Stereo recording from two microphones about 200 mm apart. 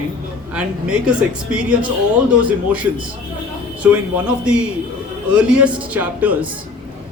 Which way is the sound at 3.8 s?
5° right (ahead or behind).